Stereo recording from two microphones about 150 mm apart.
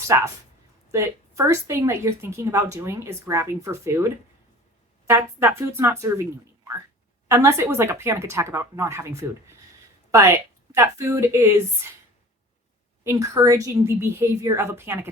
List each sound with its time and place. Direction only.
0.1 s a woman's voice: 20° right (ahead or behind)
7.3 s speech: 20° right (ahead or behind)
10.1 s speech: 20° right (ahead or behind)
13.1 s a woman's voice: 20° right (ahead or behind)